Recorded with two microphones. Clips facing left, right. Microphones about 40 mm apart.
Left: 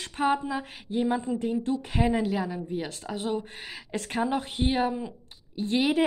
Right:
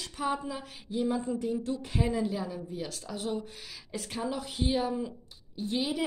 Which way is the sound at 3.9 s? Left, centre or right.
Left.